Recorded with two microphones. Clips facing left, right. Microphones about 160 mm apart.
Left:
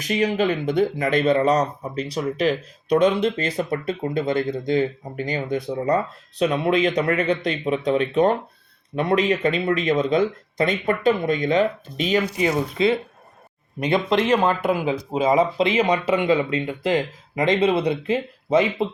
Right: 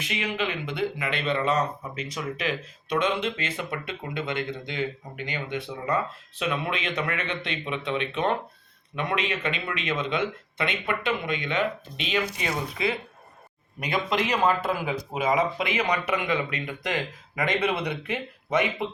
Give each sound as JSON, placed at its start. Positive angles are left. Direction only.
{"t": 0.0, "sound": "speech", "side_deg": 40}
{"t": 12.4, "sound": "speech", "side_deg": 25}